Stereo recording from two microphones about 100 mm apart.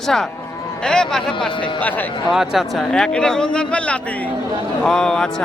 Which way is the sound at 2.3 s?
5° right (ahead or behind).